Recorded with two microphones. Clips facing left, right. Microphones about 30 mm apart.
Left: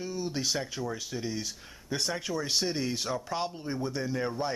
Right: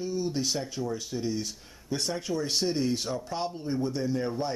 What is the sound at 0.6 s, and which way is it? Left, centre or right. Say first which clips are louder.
Speech: right 2 dB; centre.